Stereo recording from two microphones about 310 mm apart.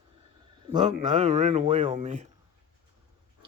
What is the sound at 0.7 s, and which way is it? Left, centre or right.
Speech, right.